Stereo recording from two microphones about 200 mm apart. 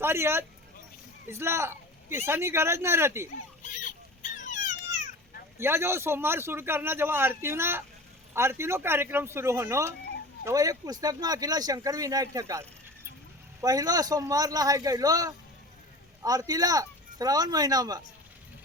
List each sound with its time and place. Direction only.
0.0 s a man's voice: 10° right (ahead or behind)
3.6 s a sound: 40° left (ahead or behind)
5.5 s a man's voice: 10° right (ahead or behind)